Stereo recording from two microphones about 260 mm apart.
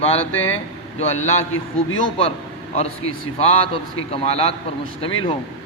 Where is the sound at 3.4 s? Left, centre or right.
Left.